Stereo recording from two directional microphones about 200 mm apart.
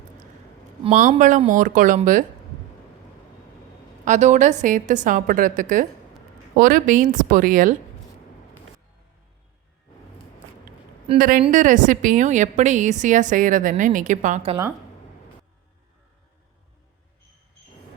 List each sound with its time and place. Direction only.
0.9 s a woman's voice: 40° right (ahead or behind)
4.0 s a woman's voice: 35° right (ahead or behind)
11.2 s a woman's voice: 45° right (ahead or behind)